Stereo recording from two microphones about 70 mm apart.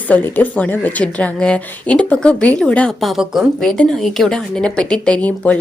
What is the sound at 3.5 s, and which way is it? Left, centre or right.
A woman's voice, centre.